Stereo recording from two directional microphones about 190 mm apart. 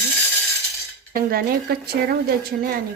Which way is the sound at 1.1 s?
50° right (ahead or behind).